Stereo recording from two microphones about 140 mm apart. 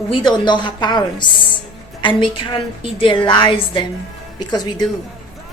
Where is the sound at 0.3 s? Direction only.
35° left (ahead or behind).